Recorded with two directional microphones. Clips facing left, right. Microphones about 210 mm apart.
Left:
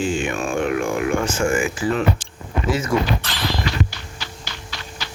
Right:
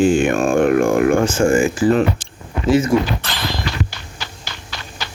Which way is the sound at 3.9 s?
55° right (ahead or behind).